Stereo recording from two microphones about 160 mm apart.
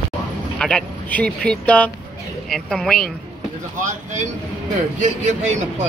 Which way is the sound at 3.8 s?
50° right (ahead or behind).